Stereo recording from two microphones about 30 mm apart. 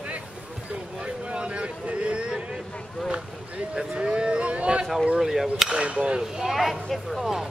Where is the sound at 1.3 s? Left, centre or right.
Right.